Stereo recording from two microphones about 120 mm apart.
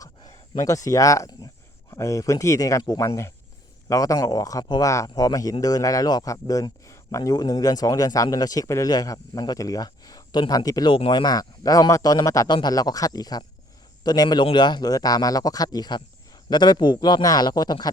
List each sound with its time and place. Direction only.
0.5 s speech: 30° left (ahead or behind)
10.9 s speech: 45° left (ahead or behind)